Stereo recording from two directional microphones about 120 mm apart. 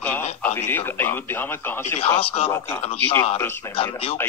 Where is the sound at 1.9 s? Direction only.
55° left (ahead or behind).